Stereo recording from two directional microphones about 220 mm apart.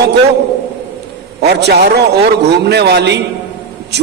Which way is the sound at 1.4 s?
50° right (ahead or behind).